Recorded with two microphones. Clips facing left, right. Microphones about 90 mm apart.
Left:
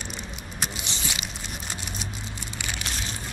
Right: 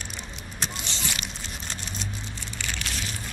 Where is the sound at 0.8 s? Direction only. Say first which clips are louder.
Even; 15° left (ahead or behind).